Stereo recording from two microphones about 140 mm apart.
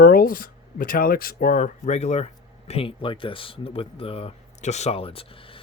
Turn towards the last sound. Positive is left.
turn(degrees=40)  # may be behind; listen again after turning